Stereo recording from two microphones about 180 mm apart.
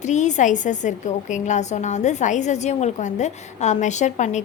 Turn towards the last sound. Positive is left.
turn(degrees=40)  # may be behind; listen again after turning